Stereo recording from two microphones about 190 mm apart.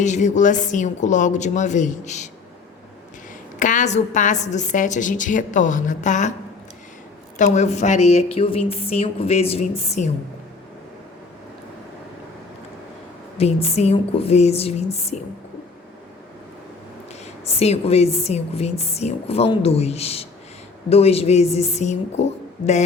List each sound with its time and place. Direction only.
0.0 s a woman's voice: 40° left (ahead or behind)
3.6 s a woman's voice: 40° left (ahead or behind)
7.3 s a woman's voice: 40° left (ahead or behind)
13.3 s a woman's voice: 30° left (ahead or behind)
17.4 s a woman's voice: 35° left (ahead or behind)